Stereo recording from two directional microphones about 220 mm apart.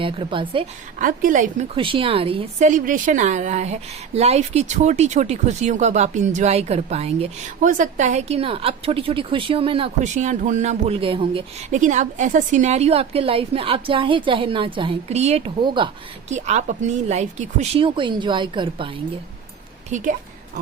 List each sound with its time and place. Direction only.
0.0 s a woman's voice: 25° right (ahead or behind)
0.9 s a woman's voice: 35° right (ahead or behind)
1.7 s a woman's voice: 25° right (ahead or behind)
16.3 s a woman's voice: 30° right (ahead or behind)